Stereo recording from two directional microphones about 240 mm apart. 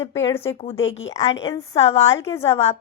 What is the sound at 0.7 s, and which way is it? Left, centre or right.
Speech, left.